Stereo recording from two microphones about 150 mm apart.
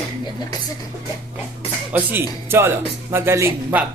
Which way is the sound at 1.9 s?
10° right (ahead or behind).